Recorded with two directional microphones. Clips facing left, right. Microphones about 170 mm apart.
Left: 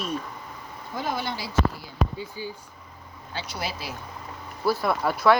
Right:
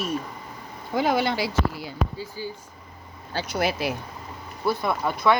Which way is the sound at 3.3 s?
50° right (ahead or behind).